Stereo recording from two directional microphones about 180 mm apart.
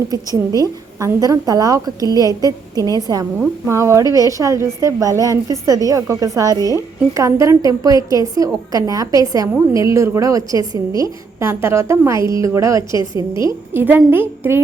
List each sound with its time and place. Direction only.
0.1 s a woman's voice: 20° right (ahead or behind)